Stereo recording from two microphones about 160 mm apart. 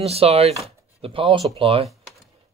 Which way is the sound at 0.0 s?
40° right (ahead or behind).